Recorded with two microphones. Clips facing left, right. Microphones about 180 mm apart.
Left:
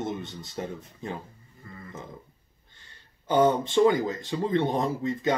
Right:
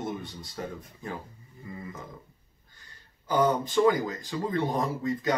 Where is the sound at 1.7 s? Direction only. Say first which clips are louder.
Right 5 dB; 15° right (ahead or behind).